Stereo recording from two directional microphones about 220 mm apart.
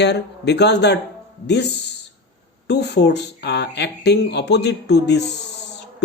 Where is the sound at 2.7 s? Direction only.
50° left (ahead or behind).